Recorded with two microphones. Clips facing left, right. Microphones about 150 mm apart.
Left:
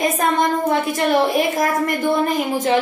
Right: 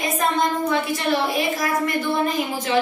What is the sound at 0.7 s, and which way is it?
A woman's voice, 45° left (ahead or behind).